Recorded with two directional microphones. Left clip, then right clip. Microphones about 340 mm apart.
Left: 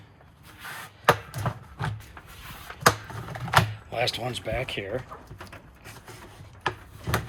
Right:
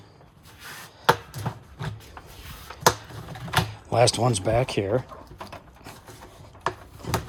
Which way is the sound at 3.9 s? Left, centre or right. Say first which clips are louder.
Right 8 dB; centre.